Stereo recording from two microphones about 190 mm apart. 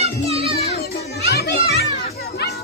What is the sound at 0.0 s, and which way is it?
Children playing, 30° right (ahead or behind).